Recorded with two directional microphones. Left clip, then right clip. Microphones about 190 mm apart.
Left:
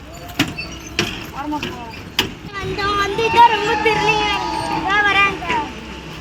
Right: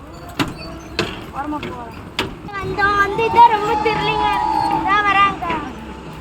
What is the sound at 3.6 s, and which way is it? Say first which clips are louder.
Speech: even; 65° right (ahead or behind).